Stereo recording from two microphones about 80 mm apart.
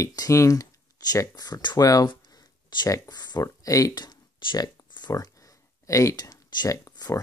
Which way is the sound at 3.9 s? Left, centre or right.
Left.